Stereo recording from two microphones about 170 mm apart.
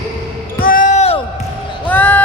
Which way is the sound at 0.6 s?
50° left (ahead or behind).